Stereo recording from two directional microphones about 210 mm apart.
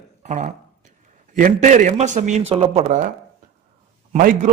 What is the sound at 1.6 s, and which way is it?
A man's voice, 35° right (ahead or behind).